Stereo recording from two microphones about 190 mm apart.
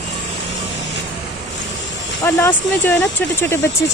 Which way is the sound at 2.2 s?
10° left (ahead or behind).